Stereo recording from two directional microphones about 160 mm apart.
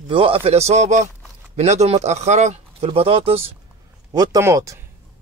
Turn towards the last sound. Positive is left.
turn(degrees=-20)  # may be behind; listen again after turning